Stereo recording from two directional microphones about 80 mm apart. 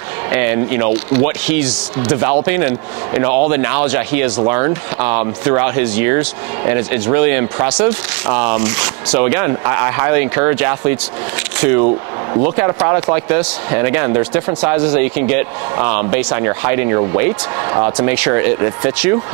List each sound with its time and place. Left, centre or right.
0.3 s speech: centre